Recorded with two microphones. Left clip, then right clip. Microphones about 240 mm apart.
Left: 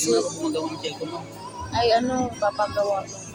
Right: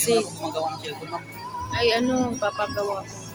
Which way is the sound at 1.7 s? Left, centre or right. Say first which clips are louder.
Left 2 dB; right.